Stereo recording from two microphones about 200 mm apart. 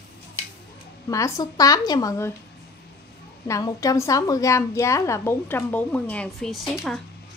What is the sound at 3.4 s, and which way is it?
A woman's voice, 15° left (ahead or behind).